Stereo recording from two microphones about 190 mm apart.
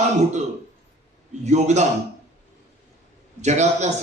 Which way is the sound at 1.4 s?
35° right (ahead or behind).